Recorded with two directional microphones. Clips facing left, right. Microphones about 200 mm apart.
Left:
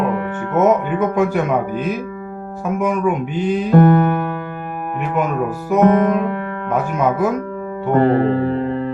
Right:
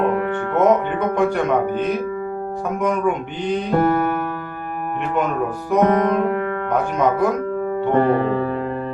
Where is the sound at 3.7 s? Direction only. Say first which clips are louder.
Left 6 dB; 50° left (ahead or behind).